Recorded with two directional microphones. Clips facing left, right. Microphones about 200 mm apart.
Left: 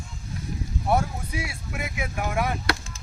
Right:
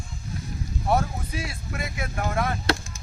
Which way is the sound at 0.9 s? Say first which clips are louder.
Even; 10° left (ahead or behind).